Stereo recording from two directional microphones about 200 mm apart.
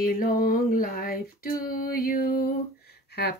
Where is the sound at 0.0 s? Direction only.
45° left (ahead or behind).